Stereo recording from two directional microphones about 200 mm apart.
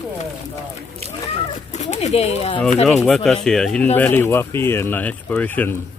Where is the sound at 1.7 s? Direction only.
35° left (ahead or behind).